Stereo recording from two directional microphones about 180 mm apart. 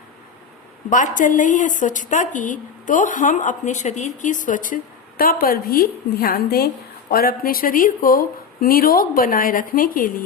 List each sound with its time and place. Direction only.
0.9 s a woman's voice: 45° left (ahead or behind)